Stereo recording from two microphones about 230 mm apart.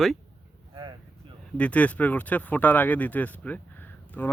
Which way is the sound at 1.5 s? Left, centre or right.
Centre.